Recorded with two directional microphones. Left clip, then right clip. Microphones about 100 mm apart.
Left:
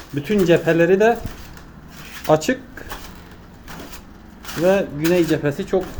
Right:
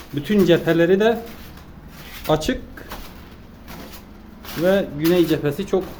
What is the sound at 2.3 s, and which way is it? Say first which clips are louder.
Speech: left 3 dB; 5° right (ahead or behind).